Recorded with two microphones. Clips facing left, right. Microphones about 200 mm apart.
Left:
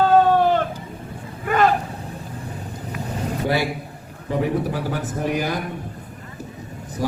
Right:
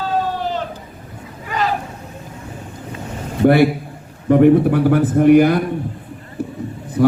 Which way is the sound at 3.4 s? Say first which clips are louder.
Right 12 dB; 60° right (ahead or behind).